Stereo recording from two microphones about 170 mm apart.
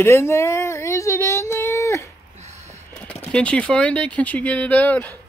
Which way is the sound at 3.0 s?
5° left (ahead or behind).